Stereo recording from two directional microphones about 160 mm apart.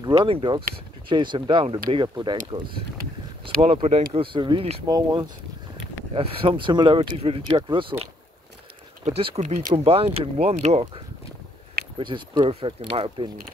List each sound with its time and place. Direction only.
0.1 s speech: 35° right (ahead or behind)
4.8 s speech: 25° right (ahead or behind)
9.0 s speech: 40° right (ahead or behind)
9.8 s speech: 40° right (ahead or behind)
12.0 s speech: 30° right (ahead or behind)